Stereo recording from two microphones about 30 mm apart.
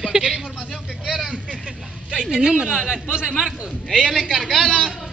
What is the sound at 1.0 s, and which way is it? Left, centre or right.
Vehicle, centre.